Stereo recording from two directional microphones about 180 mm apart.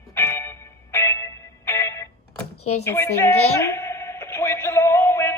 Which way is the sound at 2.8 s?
15° left (ahead or behind).